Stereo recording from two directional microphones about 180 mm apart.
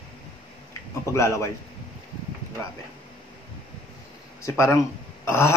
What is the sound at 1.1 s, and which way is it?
Speech, 15° left (ahead or behind).